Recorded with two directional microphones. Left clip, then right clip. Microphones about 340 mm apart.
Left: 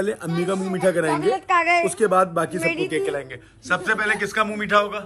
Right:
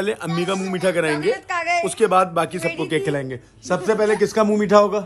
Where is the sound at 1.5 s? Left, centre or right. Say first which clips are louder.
Left 7 dB; left.